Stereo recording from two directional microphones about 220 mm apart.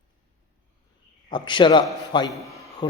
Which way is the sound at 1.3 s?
20° left (ahead or behind).